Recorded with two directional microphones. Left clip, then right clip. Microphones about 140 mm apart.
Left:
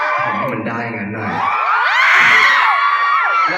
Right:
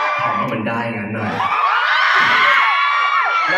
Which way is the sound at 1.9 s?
50° left (ahead or behind).